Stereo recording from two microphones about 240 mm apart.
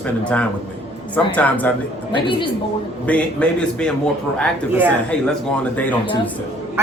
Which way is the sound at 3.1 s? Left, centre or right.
Centre.